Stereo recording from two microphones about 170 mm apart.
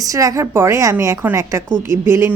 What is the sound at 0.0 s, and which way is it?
Speech, 20° right (ahead or behind).